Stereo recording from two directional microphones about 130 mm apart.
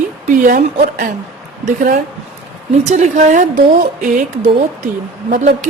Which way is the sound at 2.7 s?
65° right (ahead or behind).